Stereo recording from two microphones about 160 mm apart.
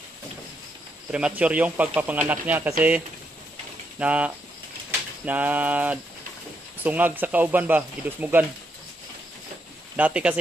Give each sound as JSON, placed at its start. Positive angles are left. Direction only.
{"t": 1.1, "sound": "speech", "side_deg": -5}
{"t": 4.0, "sound": "speech", "side_deg": -10}
{"t": 9.9, "sound": "speech", "side_deg": -10}